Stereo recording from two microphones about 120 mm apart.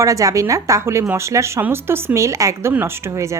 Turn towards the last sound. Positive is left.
turn(degrees=-25)  # may be behind; listen again after turning